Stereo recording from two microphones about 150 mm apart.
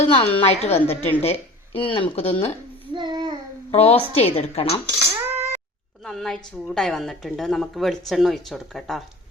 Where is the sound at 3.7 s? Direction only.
40° left (ahead or behind).